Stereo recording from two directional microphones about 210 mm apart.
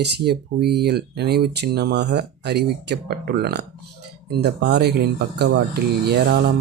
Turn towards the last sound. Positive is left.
turn(degrees=-50)  # may be behind; listen again after turning